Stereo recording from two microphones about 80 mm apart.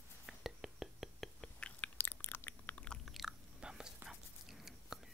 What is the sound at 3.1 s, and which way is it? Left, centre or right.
Chewing, centre.